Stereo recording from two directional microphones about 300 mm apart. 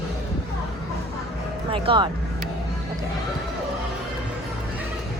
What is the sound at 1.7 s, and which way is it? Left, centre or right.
Speech, centre.